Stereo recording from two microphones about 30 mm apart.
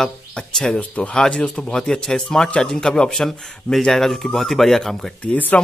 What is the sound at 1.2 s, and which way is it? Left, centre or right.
Speech, left.